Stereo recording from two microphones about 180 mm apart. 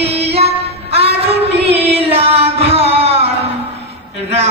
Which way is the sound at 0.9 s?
35° right (ahead or behind).